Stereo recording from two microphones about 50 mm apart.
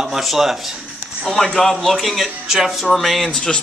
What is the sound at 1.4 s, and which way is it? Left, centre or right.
Speech, centre.